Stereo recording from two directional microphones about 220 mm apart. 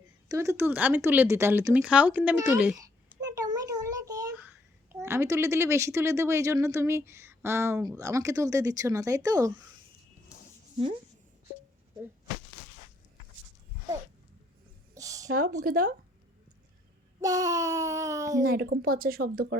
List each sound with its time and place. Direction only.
0.3 s a child's voice: 10° right (ahead or behind)
14.9 s a sound: 15° right (ahead or behind)
15.3 s speech: 40° right (ahead or behind)
17.2 s speech: 15° right (ahead or behind)
18.4 s speech: 45° right (ahead or behind)